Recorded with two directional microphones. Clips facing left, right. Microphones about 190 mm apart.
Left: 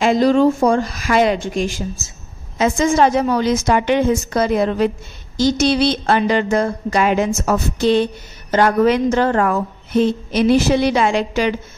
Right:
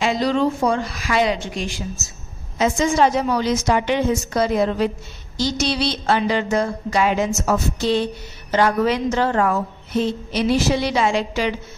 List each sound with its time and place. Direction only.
0.0 s a woman's voice: 50° left (ahead or behind)